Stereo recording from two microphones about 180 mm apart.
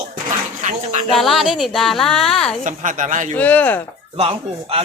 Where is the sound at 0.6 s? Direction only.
40° right (ahead or behind).